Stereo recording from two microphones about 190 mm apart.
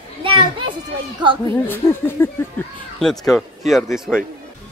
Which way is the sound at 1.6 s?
10° left (ahead or behind).